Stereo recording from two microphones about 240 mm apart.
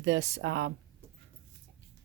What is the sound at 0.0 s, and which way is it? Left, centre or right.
Speech, right.